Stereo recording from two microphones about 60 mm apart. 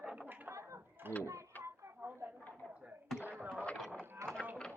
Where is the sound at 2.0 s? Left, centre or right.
Right.